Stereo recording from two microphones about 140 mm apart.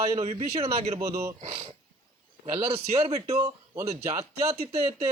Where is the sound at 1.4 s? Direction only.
45° right (ahead or behind).